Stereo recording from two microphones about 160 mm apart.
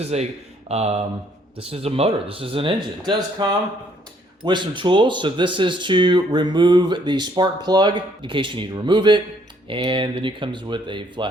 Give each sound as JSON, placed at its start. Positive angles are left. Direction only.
{"t": 0.0, "sound": "speech", "side_deg": -45}